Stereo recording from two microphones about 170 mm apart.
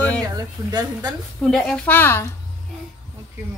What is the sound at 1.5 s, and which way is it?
Music, 10° left (ahead or behind).